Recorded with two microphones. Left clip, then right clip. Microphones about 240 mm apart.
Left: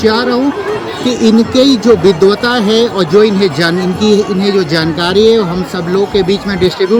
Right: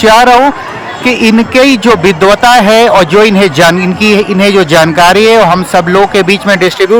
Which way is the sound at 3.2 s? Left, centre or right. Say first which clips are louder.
Right 5 dB; right.